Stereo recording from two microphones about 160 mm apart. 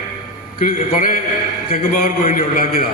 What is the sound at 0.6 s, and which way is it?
A man's voice, 60° left (ahead or behind).